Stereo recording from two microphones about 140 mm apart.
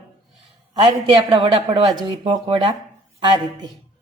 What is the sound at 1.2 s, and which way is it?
A woman's voice, 45° right (ahead or behind).